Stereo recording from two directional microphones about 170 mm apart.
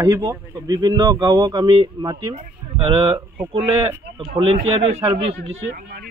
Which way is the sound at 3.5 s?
35° right (ahead or behind).